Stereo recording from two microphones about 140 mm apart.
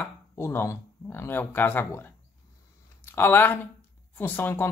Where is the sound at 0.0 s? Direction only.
15° left (ahead or behind).